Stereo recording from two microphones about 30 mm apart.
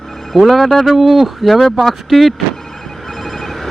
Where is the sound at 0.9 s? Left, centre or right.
Centre.